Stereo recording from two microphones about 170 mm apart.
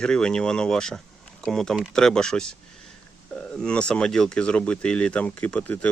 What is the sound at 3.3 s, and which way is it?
Speech, 5° left (ahead or behind).